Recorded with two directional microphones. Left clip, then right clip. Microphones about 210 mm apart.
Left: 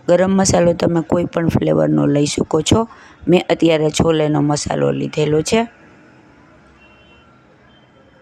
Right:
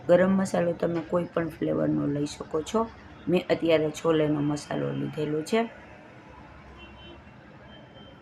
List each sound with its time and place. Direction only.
0.1 s speech: 50° left (ahead or behind)